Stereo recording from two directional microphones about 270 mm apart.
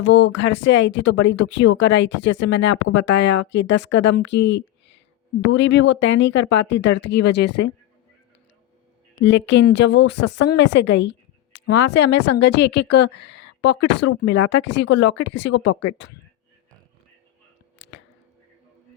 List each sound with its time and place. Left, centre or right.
0.0 s a woman's voice: left
9.1 s a woman's voice: left
10.5 s a sound: left
11.7 s a woman's voice: left